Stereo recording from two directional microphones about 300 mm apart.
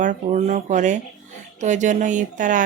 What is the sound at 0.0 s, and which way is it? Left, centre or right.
Speech, right.